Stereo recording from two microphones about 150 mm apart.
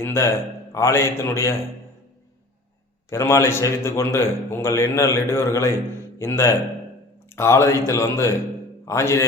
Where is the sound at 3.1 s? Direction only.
20° left (ahead or behind).